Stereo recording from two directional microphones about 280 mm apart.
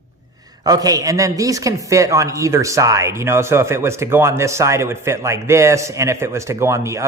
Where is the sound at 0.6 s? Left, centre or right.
Centre.